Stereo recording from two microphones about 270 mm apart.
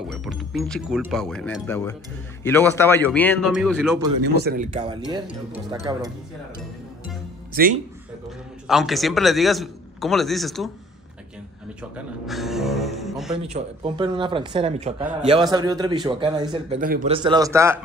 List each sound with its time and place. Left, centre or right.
0.1 s a man's voice: centre
4.4 s speech: right
5.2 s a man's voice: centre
7.5 s speech: right
8.6 s a man's voice: centre
11.9 s a man's voice: centre
13.4 s a man's voice: right